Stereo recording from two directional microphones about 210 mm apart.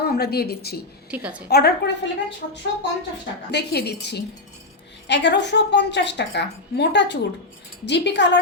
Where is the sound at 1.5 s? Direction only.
50° left (ahead or behind).